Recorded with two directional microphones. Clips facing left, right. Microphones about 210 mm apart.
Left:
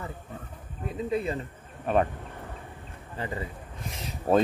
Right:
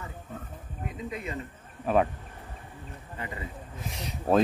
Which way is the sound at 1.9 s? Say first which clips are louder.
Even; centre (ahead or behind).